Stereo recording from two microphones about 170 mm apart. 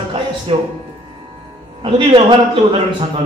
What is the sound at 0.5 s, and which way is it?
Speech, 35° right (ahead or behind).